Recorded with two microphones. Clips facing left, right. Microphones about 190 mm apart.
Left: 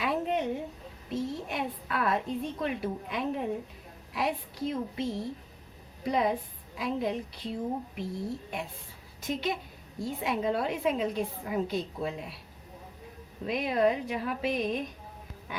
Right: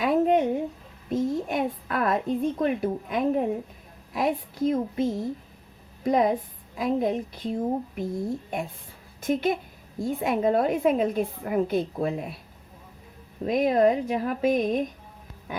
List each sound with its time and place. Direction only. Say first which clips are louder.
0.0 s a sound: right 8 dB; 50° right (ahead or behind)
2.6 s a woman's voice: right 7 dB; 50° right (ahead or behind)
13.4 s a woman's voice: right 6 dB; 45° right (ahead or behind)